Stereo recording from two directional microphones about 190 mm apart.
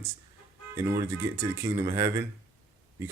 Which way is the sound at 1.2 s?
15° right (ahead or behind).